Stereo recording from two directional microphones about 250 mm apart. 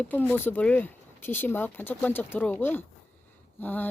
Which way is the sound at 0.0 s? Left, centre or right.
Centre.